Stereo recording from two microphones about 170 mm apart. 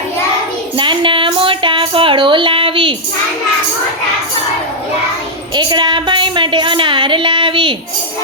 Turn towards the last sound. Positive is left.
turn(degrees=-30)  # may be behind; listen again after turning